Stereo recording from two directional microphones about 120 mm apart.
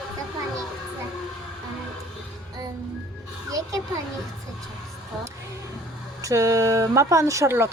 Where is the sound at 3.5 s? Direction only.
30° right (ahead or behind).